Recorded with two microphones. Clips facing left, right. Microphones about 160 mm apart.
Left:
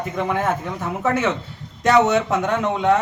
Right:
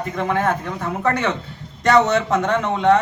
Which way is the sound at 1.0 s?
5° left (ahead or behind).